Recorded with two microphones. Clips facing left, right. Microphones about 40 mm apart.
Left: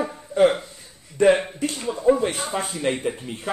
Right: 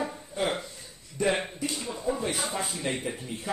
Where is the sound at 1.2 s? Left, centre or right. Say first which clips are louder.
Left 10 dB; left.